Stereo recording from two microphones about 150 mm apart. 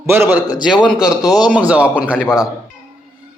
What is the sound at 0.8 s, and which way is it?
A man's voice, 5° right (ahead or behind).